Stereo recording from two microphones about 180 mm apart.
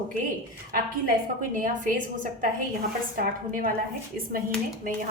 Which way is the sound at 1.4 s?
50° right (ahead or behind).